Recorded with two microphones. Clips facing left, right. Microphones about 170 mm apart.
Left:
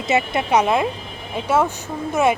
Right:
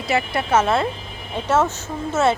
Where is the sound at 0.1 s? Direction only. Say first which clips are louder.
Left 1 dB; 20° left (ahead or behind).